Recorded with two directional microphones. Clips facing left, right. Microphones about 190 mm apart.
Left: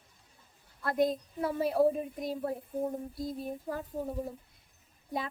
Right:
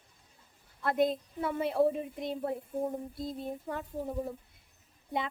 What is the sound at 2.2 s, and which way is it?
A woman's voice, 25° right (ahead or behind).